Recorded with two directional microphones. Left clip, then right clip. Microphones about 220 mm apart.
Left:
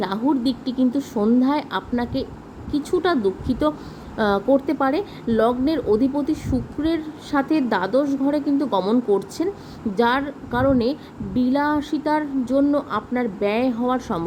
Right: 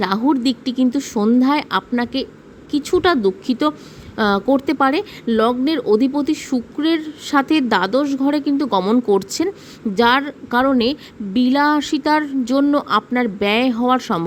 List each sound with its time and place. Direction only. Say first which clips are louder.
0.0 s a woman's voice: right 4 dB; 40° right (ahead or behind)